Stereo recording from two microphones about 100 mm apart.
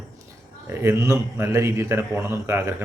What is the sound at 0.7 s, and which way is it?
Speech, 25° right (ahead or behind).